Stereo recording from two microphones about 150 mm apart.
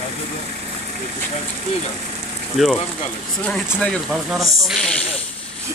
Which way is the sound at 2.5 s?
Centre (ahead or behind).